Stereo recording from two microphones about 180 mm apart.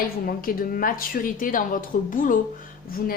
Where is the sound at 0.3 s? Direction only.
55° left (ahead or behind).